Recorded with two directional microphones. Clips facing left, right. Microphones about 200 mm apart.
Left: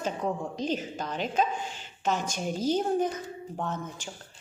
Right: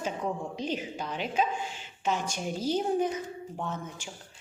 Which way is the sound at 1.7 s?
45° left (ahead or behind).